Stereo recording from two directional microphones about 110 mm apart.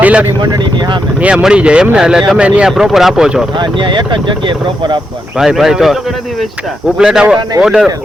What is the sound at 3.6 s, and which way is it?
Speech, 45° right (ahead or behind).